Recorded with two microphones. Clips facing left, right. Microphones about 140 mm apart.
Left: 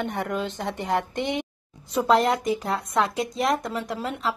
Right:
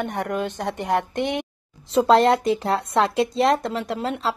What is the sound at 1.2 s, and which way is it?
Speech, 60° right (ahead or behind).